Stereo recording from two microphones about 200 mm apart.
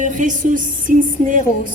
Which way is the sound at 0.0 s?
40° right (ahead or behind).